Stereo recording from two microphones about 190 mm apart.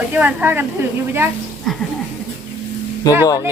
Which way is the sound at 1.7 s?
Centre (ahead or behind).